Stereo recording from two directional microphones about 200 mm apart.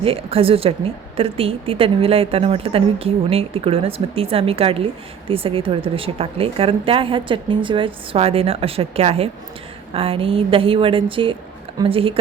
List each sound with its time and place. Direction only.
0.0 s speech: 30° right (ahead or behind)